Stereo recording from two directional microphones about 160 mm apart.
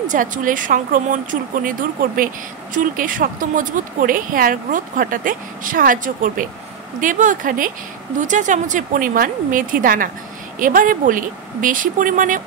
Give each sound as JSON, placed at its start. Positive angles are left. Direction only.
{"t": 0.1, "sound": "speech", "side_deg": -55}